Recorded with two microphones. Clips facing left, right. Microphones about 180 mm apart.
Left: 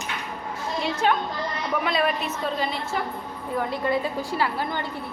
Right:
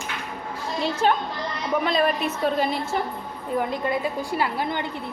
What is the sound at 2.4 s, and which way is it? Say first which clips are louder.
Speech: right 5 dB; 50° right (ahead or behind).